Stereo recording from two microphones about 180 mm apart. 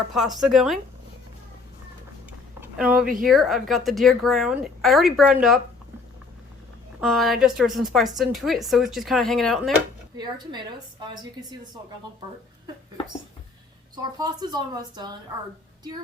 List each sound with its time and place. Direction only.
0.1 s a woman's voice: centre (ahead or behind)
2.6 s a sound: 5° right (ahead or behind)
3.2 s a woman's voice: centre (ahead or behind)
7.0 s a woman's voice: centre (ahead or behind)
10.2 s a woman's voice: 25° right (ahead or behind)
13.9 s a woman's voice: 20° right (ahead or behind)